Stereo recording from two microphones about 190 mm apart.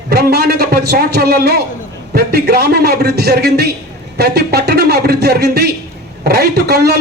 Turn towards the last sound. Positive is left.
turn(degrees=-55)  # may be behind; listen again after turning